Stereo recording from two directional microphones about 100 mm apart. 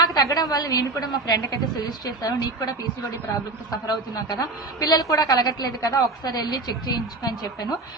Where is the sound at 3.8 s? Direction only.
40° left (ahead or behind).